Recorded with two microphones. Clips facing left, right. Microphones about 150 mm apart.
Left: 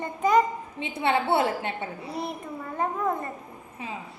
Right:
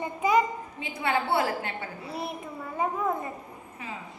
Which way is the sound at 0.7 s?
25° left (ahead or behind).